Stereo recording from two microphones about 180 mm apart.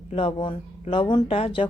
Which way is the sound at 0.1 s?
30° left (ahead or behind).